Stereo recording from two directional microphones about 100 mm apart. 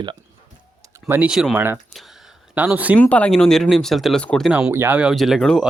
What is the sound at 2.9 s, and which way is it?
Speech, 15° left (ahead or behind).